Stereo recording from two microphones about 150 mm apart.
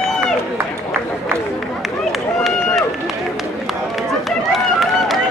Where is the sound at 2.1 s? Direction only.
Centre (ahead or behind).